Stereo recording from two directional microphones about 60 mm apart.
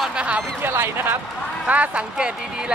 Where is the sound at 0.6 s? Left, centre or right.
Right.